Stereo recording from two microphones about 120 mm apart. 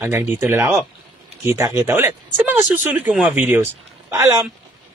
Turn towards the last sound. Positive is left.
turn(degrees=-25)  # may be behind; listen again after turning